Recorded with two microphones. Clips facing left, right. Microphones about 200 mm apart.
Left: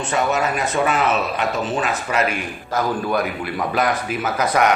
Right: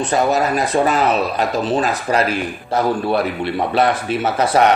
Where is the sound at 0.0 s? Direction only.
35° right (ahead or behind).